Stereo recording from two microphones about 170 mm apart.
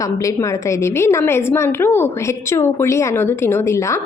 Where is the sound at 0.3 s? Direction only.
15° left (ahead or behind).